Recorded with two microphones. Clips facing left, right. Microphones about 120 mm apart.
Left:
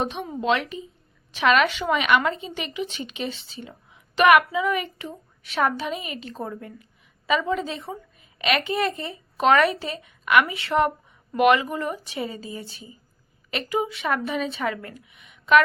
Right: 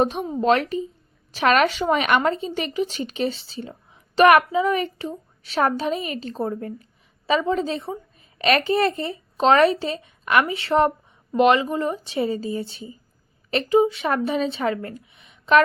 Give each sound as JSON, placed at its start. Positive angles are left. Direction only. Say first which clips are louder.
{"t": 0.0, "sound": "a woman's voice", "louder": "right 6 dB", "side_deg": -40}